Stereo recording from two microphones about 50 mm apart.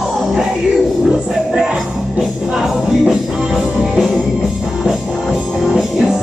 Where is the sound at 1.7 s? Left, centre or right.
Centre.